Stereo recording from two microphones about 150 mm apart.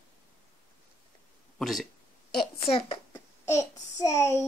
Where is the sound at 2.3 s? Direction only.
35° left (ahead or behind).